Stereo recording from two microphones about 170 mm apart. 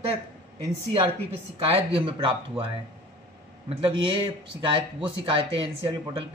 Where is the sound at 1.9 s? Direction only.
30° right (ahead or behind).